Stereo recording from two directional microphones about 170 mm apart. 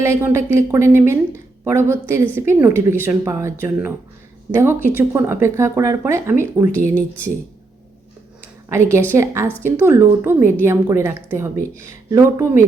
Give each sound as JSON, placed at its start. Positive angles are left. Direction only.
{"t": 0.0, "sound": "a woman's voice", "side_deg": -15}
{"t": 8.7, "sound": "a woman's voice", "side_deg": -15}